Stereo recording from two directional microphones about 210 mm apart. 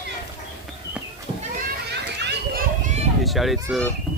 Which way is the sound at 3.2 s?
Centre (ahead or behind).